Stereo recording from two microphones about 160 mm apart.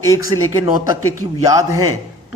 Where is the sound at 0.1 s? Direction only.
20° right (ahead or behind).